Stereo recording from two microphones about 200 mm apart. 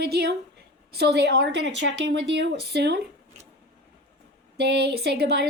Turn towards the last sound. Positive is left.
turn(degrees=-55)  # may be behind; listen again after turning